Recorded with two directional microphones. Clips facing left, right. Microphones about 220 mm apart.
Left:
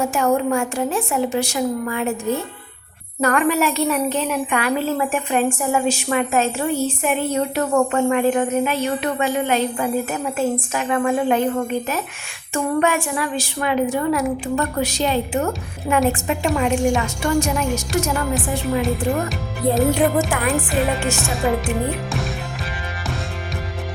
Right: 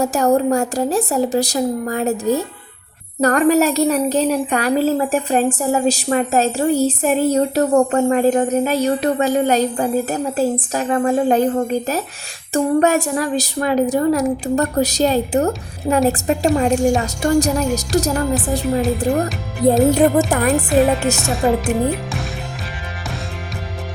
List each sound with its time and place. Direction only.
0.0 s a woman's voice: 40° right (ahead or behind)